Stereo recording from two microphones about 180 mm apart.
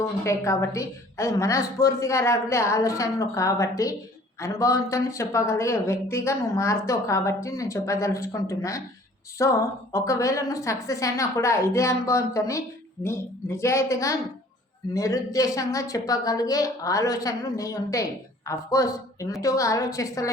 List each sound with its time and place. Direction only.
0.0 s a woman's voice: 15° left (ahead or behind)